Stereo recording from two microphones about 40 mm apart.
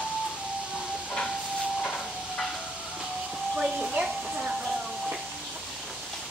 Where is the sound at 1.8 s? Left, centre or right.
Centre.